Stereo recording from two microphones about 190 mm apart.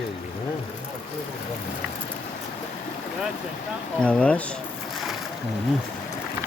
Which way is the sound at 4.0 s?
5° left (ahead or behind).